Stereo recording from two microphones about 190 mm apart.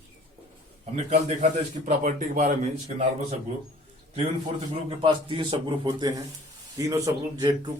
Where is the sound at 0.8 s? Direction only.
35° right (ahead or behind).